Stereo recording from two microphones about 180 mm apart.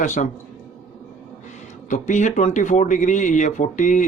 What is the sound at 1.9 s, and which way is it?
Speech, 45° left (ahead or behind).